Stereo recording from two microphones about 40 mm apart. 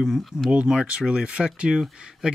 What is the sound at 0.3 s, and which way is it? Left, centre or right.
Speech, centre.